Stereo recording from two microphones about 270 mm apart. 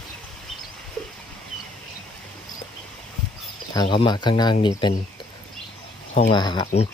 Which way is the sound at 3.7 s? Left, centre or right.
Centre.